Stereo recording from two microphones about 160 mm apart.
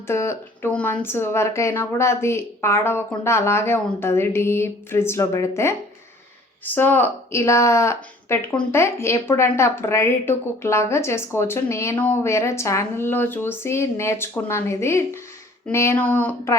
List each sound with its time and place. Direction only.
0.1 s a woman's voice: 15° left (ahead or behind)